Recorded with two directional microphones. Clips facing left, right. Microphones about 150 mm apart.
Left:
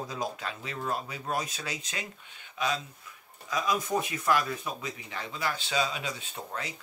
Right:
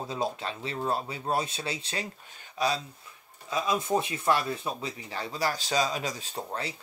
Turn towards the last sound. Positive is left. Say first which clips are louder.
# right 3 dB
turn(degrees=-35)  # may be behind; listen again after turning